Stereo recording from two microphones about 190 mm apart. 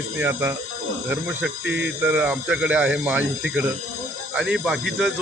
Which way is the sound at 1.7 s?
65° right (ahead or behind).